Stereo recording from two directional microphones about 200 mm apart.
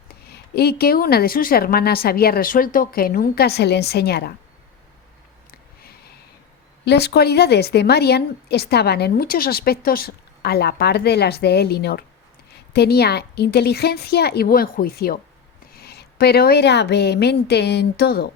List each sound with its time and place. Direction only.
0.1 s a woman's voice: 55° left (ahead or behind)
6.8 s a woman's voice: 55° left (ahead or behind)